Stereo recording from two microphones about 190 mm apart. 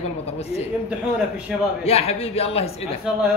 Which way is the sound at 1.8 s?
30° left (ahead or behind).